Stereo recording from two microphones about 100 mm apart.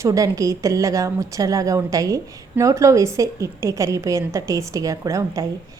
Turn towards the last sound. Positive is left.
turn(degrees=-35)  # may be behind; listen again after turning